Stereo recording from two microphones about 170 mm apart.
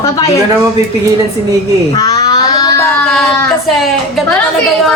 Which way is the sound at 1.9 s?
20° left (ahead or behind).